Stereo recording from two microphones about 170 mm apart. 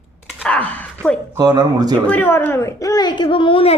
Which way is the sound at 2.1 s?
10° left (ahead or behind).